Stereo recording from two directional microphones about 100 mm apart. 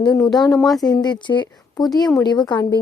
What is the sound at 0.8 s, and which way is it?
A woman's voice, 45° left (ahead or behind).